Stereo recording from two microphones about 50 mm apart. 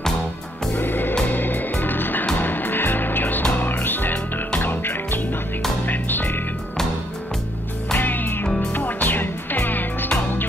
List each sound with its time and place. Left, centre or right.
0.7 s music: left
8.0 s music: left